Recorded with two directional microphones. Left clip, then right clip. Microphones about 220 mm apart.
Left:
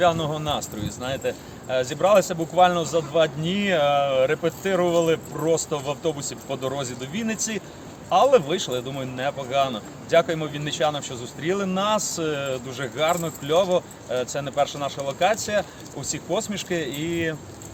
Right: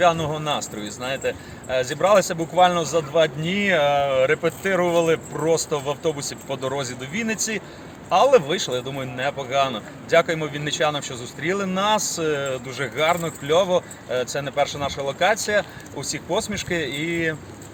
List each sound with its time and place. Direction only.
0.0 s speech: 20° right (ahead or behind)
16.9 s speech: 25° left (ahead or behind)